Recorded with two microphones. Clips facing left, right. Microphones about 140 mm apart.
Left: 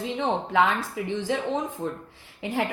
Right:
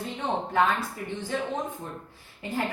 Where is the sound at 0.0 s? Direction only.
90° left.